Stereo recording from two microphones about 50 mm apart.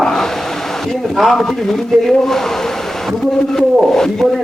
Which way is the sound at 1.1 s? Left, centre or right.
Centre.